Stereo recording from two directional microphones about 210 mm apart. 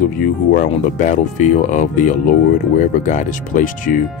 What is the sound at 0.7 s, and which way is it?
Speech, 35° left (ahead or behind).